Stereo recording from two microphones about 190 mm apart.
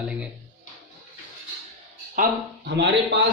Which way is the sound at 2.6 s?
65° right (ahead or behind).